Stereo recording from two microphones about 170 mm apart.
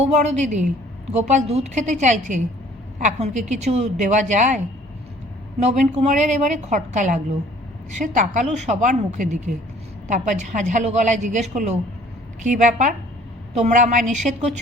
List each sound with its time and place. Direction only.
0.0 s a woman's voice: 40° right (ahead or behind)
5.6 s a woman's voice: 40° right (ahead or behind)